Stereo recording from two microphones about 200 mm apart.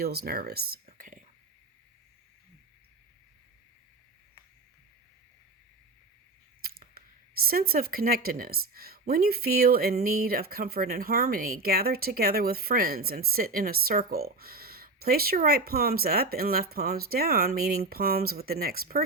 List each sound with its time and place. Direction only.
0.0 s speech: 50° right (ahead or behind)
0.9 s whispering: 40° right (ahead or behind)
6.6 s camera: 50° right (ahead or behind)
7.4 s speech: 50° right (ahead or behind)